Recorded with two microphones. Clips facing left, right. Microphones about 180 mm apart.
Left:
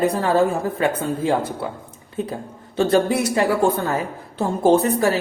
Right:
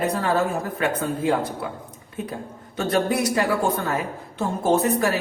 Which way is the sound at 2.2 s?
30° left (ahead or behind).